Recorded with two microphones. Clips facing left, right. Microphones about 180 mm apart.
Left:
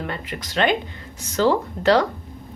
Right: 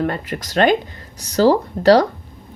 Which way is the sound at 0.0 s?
45° right (ahead or behind).